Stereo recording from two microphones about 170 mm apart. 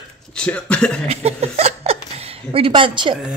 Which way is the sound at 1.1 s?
35° right (ahead or behind).